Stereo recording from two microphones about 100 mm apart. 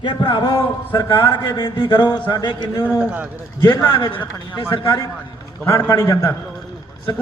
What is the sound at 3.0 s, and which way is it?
Speech, 15° right (ahead or behind).